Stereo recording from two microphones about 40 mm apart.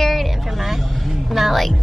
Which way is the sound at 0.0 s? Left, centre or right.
Centre.